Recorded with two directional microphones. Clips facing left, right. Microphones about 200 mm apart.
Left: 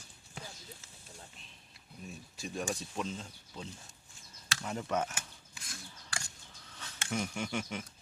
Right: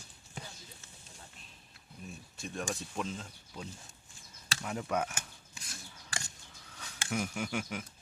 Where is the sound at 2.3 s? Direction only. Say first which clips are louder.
Left 1 dB; centre (ahead or behind).